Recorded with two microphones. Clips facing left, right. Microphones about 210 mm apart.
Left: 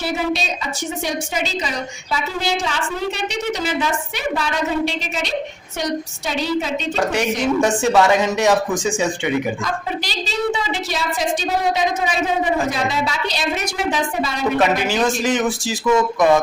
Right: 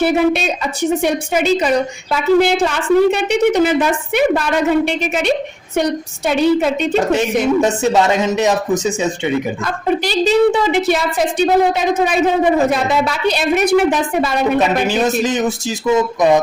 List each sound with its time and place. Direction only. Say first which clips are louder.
0.0 s a woman's voice: right 8 dB; 60° right (ahead or behind)
6.9 s a woman's voice: right 2 dB; 20° right (ahead or behind)
10.1 s a woman's voice: right 11 dB; 55° right (ahead or behind)
14.8 s a woman's voice: right 3 dB; 20° right (ahead or behind)